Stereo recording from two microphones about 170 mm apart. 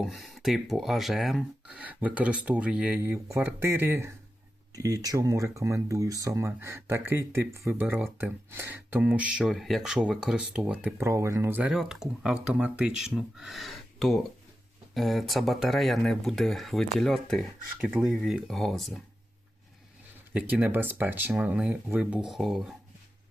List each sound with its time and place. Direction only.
0.0 s speech: centre (ahead or behind)
20.3 s speech: 10° right (ahead or behind)